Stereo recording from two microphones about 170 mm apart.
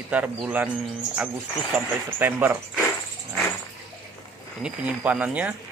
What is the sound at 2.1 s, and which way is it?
Speech, 10° right (ahead or behind).